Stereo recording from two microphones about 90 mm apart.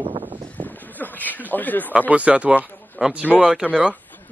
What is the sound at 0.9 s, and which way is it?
Speech, 20° left (ahead or behind).